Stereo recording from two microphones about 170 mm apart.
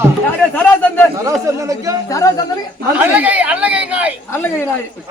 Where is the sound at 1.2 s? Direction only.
20° right (ahead or behind).